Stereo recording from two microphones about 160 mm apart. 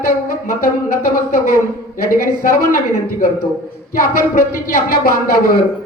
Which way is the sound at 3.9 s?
65° left (ahead or behind).